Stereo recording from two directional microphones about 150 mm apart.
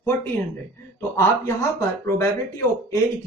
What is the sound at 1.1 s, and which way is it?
Speech, 15° left (ahead or behind).